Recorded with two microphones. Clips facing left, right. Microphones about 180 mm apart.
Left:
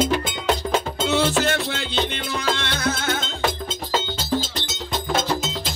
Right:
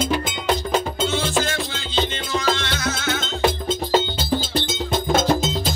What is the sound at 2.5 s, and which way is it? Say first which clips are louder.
Music: even; 55° left (ahead or behind).